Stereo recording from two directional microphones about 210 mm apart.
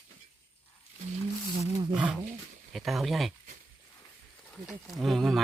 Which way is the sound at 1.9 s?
5° right (ahead or behind).